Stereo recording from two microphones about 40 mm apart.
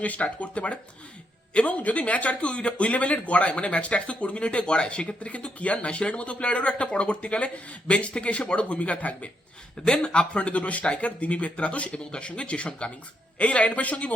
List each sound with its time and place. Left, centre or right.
0.0 s speech: left
9.8 s speech: left